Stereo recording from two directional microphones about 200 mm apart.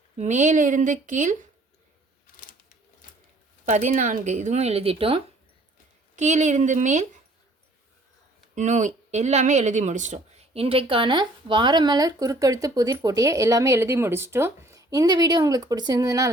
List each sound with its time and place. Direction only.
0.2 s speech: 35° right (ahead or behind)
3.7 s speech: 35° right (ahead or behind)
8.5 s speech: 35° right (ahead or behind); by 16.3 s 15° right (ahead or behind)